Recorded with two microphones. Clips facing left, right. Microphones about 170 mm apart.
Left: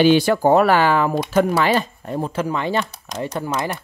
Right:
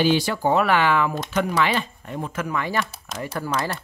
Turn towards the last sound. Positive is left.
turn(degrees=20)  # may be behind; listen again after turning